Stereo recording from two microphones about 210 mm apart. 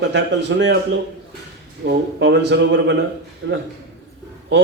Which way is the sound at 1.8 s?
55° right (ahead or behind).